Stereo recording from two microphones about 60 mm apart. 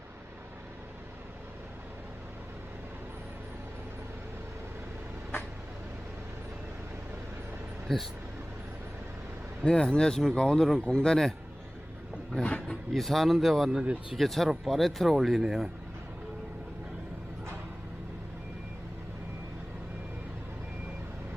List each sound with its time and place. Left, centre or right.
7.9 s speech: centre
9.6 s speech: centre
12.9 s speech: centre